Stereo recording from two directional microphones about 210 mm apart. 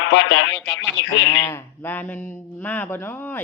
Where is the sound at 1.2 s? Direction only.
15° left (ahead or behind).